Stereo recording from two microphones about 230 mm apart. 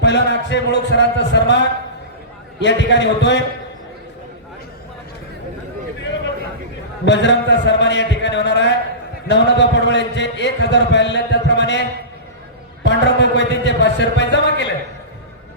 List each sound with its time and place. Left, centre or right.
0.0 s a man's voice: left
7.0 s a man's voice: left
12.8 s a sound: left
13.5 s a man's voice: left